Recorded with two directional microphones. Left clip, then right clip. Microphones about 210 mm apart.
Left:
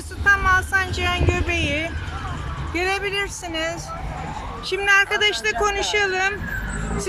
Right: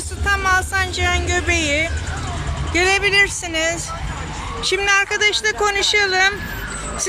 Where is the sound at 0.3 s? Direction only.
Centre (ahead or behind).